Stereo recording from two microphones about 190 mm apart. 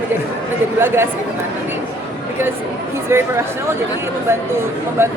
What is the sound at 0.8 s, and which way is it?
Speech, 10° right (ahead or behind).